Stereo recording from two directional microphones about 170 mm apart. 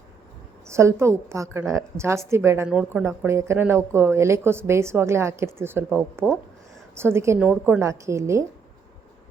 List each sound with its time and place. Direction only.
0.7 s speech: 15° right (ahead or behind)